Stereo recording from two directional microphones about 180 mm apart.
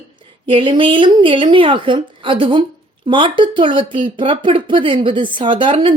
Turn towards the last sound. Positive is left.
turn(degrees=-30)  # may be behind; listen again after turning